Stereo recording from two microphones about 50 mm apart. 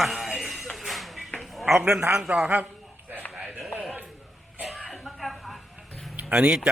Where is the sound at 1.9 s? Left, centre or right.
Right.